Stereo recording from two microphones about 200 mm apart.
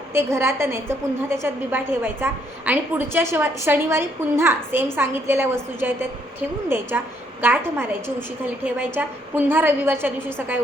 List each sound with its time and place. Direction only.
0.1 s a woman's voice: 10° right (ahead or behind)